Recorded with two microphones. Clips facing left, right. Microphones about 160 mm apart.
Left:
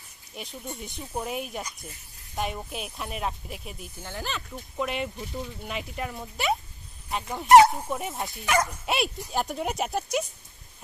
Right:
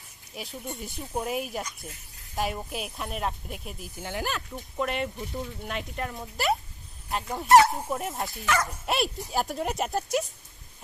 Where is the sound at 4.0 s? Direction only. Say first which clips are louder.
Right 4 dB; 15° right (ahead or behind).